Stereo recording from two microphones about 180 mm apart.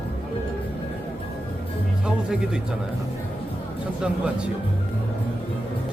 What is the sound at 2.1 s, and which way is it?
Speech, 5° right (ahead or behind).